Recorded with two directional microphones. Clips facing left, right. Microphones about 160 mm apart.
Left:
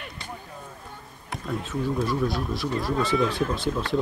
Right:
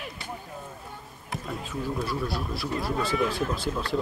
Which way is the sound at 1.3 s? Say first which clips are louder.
Left 4 dB; centre (ahead or behind).